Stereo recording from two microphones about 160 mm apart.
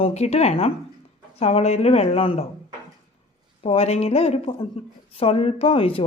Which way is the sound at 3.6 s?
35° left (ahead or behind).